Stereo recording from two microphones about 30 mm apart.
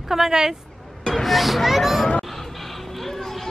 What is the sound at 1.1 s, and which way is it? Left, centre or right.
Speech, centre.